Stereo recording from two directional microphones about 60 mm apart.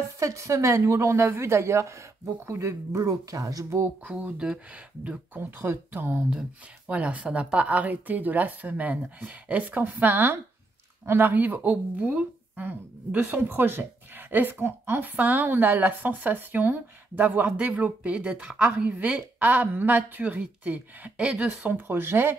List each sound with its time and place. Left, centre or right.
0.2 s a woman's voice: right
4.1 s speech: centre
5.6 s a woman's voice: right
6.9 s a woman's voice: right
13.2 s a woman's voice: right
21.7 s a woman's voice: right